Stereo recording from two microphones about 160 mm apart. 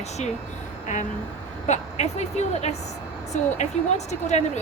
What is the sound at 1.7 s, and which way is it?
Speech, 45° left (ahead or behind).